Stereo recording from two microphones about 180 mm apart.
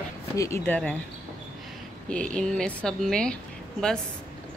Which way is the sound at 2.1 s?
5° left (ahead or behind).